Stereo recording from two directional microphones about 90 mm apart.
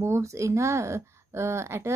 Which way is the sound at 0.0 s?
30° right (ahead or behind).